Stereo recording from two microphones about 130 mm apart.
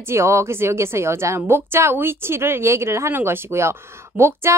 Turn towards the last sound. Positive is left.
turn(degrees=-20)  # may be behind; listen again after turning